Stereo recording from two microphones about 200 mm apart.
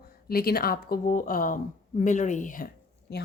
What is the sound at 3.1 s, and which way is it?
Speech, 55° left (ahead or behind).